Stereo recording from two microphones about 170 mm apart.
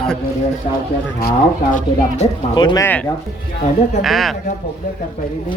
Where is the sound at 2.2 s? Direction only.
40° left (ahead or behind).